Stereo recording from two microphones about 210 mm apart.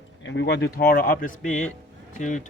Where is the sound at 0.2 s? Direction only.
60° left (ahead or behind).